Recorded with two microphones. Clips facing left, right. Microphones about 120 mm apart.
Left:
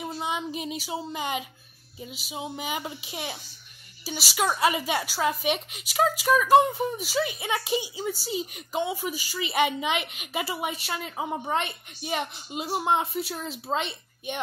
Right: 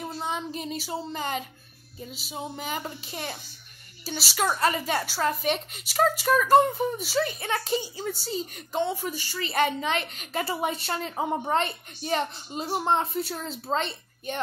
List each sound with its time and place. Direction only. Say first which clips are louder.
0.0 s a woman's voice: left 1 dB; 5° left (ahead or behind)
11.1 s a woman's voice: right 4 dB; 35° right (ahead or behind)
11.4 s a woman's voice: right 2 dB; 5° left (ahead or behind)